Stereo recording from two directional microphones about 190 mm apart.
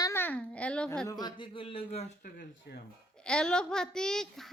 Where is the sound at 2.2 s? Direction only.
50° left (ahead or behind).